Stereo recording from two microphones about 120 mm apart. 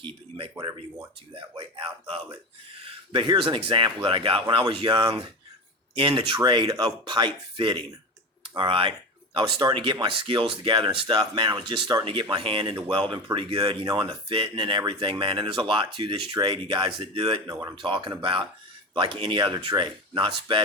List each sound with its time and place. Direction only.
0.0 s speech: 50° right (ahead or behind)
0.5 s speech: 30° right (ahead or behind)
1.4 s speech: 45° right (ahead or behind)
13.8 s speech: 35° right (ahead or behind)
14.1 s speech: 50° right (ahead or behind)